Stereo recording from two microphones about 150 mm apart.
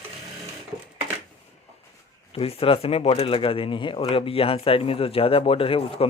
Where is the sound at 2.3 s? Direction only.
40° left (ahead or behind).